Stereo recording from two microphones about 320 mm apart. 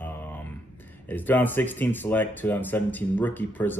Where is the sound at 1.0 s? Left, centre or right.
Centre.